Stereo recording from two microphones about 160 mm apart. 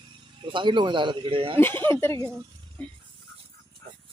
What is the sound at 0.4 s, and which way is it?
A man's voice, 30° right (ahead or behind).